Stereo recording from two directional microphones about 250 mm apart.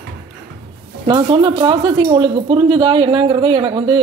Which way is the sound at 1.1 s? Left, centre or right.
Centre.